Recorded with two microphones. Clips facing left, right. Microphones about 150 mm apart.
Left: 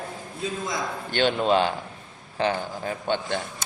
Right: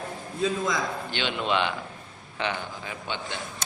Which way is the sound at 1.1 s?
45° left (ahead or behind).